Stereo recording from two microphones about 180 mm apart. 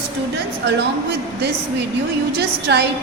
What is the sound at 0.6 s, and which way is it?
A woman's voice, 70° right (ahead or behind).